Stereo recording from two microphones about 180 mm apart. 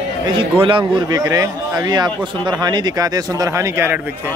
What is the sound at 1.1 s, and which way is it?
A man's voice, 20° right (ahead or behind).